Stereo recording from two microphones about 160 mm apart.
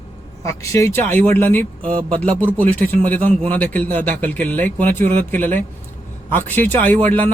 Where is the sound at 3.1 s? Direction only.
10° left (ahead or behind).